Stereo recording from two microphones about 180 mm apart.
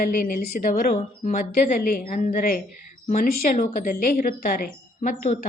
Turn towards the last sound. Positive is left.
turn(degrees=50)  # may be behind; listen again after turning